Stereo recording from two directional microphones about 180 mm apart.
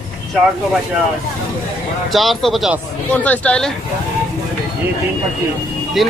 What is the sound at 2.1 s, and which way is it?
Speech, centre (ahead or behind).